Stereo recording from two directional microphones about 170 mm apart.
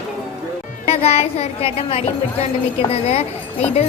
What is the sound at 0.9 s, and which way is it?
A woman's voice, 35° left (ahead or behind).